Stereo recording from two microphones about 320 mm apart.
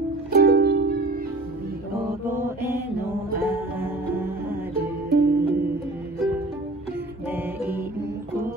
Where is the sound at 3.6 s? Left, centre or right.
Centre.